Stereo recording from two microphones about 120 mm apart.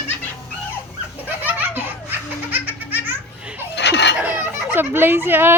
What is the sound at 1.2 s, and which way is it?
Laughter, 15° right (ahead or behind).